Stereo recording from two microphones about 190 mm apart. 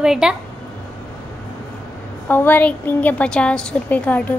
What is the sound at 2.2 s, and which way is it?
A woman's voice, 10° left (ahead or behind).